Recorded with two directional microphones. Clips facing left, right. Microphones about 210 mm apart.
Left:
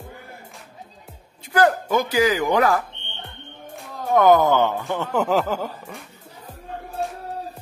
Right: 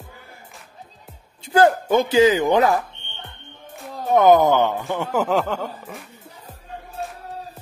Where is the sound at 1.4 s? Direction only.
25° right (ahead or behind).